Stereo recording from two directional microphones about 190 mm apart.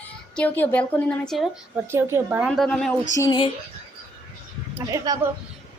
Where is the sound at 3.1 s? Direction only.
20° left (ahead or behind).